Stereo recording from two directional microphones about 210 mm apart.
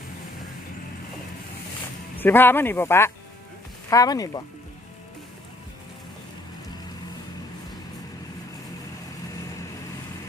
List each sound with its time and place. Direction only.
2.1 s speech: 10° left (ahead or behind)